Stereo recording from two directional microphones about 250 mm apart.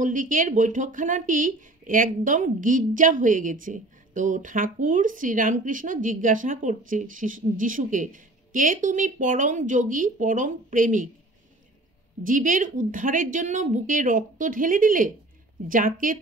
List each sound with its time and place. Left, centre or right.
0.0 s speech: right
12.3 s speech: right